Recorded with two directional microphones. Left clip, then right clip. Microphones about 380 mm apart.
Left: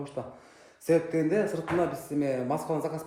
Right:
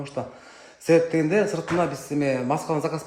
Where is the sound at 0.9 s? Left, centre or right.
Right.